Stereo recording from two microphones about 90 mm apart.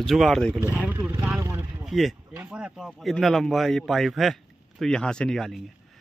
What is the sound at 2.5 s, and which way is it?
Speech, 10° right (ahead or behind).